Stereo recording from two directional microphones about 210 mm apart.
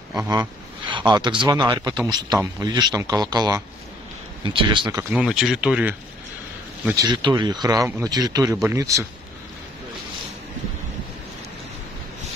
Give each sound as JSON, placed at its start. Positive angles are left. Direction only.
{"t": 0.3, "sound": "speech", "side_deg": -20}
{"t": 5.1, "sound": "speech", "side_deg": 0}
{"t": 6.9, "sound": "speech", "side_deg": -20}